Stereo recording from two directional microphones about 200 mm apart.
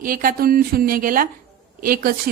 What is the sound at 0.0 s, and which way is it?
A woman's voice, 45° right (ahead or behind).